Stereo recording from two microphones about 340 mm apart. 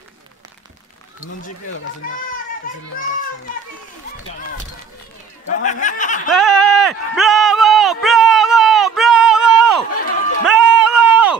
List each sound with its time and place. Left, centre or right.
2.0 s a child's voice: left
5.5 s speech: left
6.2 s a sound: centre